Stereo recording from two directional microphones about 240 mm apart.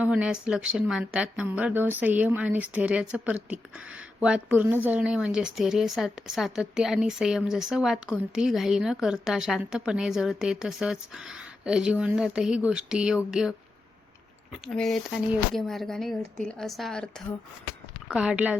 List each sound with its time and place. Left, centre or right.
0.0 s a woman's voice: centre
14.7 s a woman's voice: centre